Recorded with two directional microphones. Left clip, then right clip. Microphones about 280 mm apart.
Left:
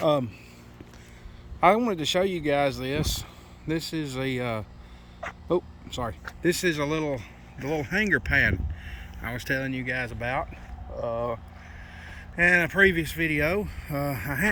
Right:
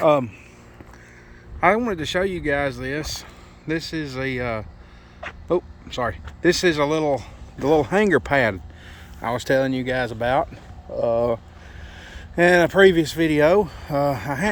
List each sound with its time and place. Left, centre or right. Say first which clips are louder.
0.0 s speech: right 6 dB; centre
1.6 s speech: right 2 dB; centre
7.6 s speech: right 9 dB; right
12.4 s speech: right 6 dB; right